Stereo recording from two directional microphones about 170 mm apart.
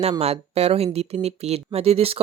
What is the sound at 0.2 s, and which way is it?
Speech, 40° right (ahead or behind).